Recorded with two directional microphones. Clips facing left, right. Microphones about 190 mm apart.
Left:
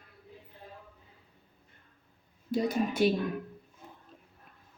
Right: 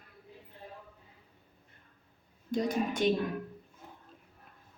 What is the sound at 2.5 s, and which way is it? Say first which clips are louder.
Speech: left 2 dB; 5° left (ahead or behind).